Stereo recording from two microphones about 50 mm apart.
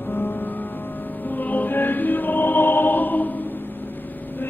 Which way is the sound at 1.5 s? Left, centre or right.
Left.